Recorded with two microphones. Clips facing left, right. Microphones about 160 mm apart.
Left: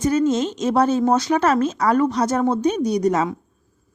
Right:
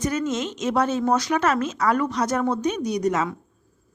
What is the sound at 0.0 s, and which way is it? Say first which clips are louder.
Speech: left 6 dB; 30° left (ahead or behind).